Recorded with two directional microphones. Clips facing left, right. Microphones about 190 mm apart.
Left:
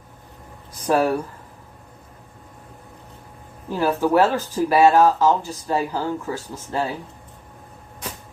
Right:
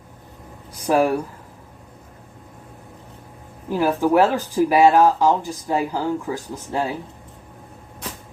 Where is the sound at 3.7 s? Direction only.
15° right (ahead or behind).